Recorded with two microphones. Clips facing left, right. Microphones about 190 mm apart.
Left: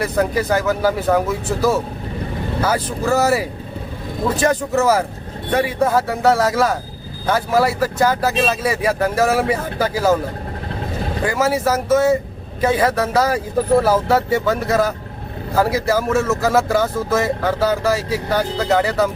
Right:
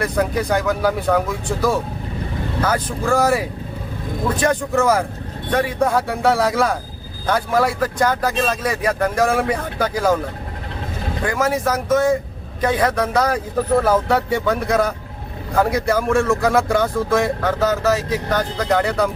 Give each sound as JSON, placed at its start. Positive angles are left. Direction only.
{"t": 0.0, "sound": "speech", "side_deg": 5}
{"t": 11.2, "sound": "speech", "side_deg": 5}